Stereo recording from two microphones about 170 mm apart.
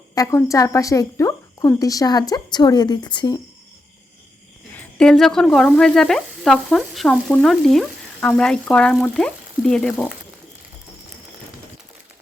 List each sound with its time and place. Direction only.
0.1 s a woman's voice: 20° left (ahead or behind)
4.8 s sizzle: 5° left (ahead or behind)